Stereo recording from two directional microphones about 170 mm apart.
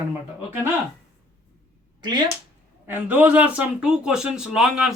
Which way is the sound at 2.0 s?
25° right (ahead or behind).